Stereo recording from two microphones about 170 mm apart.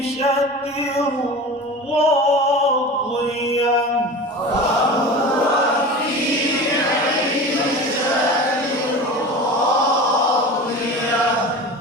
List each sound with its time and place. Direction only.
2.0 s music: 40° left (ahead or behind)